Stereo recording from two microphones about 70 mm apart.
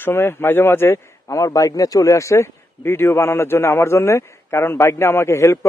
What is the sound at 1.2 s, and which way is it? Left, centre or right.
A man's voice, left.